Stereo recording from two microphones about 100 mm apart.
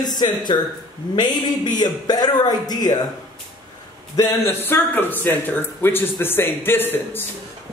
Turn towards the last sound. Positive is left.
turn(degrees=20)  # may be behind; listen again after turning